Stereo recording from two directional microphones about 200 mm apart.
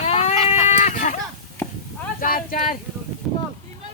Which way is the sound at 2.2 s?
45° left (ahead or behind).